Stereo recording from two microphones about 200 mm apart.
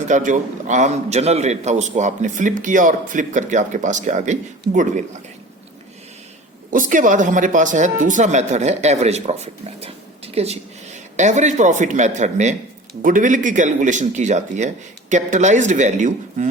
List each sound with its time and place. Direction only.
0.1 s a man's voice: 40° right (ahead or behind)
6.7 s a man's voice: 40° right (ahead or behind)